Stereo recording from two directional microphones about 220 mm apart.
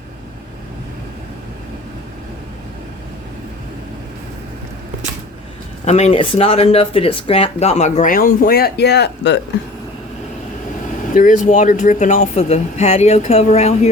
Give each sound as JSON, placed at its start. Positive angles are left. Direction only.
{"t": 5.8, "sound": "speech", "side_deg": 30}
{"t": 11.1, "sound": "speech", "side_deg": 35}